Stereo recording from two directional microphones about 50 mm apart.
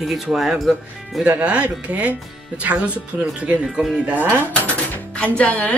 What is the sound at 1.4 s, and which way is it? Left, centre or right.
Speech, right.